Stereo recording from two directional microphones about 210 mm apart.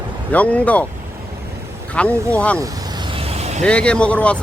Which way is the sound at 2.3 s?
5° left (ahead or behind).